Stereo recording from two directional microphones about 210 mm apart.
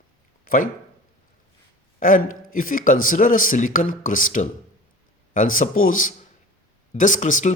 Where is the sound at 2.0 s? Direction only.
40° left (ahead or behind).